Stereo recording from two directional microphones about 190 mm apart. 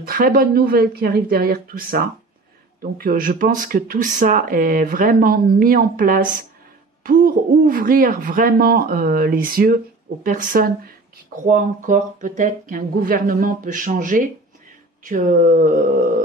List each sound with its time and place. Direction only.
0.0 s speech: 50° right (ahead or behind)